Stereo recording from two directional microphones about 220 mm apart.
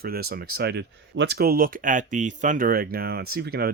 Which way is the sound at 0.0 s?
45° right (ahead or behind).